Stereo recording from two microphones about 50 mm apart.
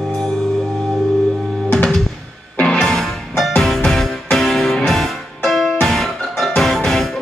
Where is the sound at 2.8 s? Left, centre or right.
Centre.